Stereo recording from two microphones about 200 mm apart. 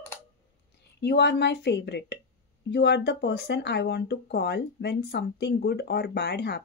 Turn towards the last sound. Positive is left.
turn(degrees=55)  # may be behind; listen again after turning